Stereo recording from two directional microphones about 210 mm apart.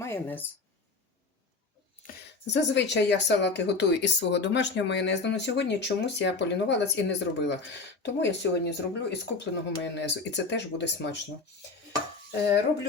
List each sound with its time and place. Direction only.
0.0 s a woman's voice: 10° left (ahead or behind)
2.5 s speech: 55° left (ahead or behind)